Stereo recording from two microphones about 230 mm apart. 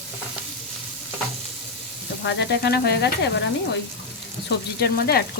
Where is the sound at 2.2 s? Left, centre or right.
Left.